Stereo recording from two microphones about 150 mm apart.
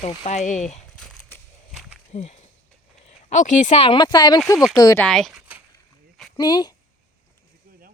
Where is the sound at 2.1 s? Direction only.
50° left (ahead or behind); by 5.0 s 25° left (ahead or behind).